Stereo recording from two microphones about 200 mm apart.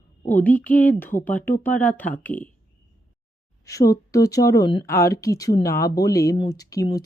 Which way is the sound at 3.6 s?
15° left (ahead or behind).